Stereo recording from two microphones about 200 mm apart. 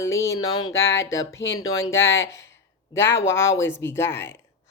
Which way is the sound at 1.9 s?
70° left (ahead or behind).